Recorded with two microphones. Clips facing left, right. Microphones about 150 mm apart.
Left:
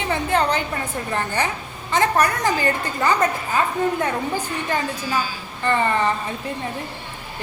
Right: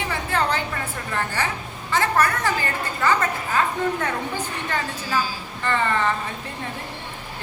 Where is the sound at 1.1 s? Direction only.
20° left (ahead or behind).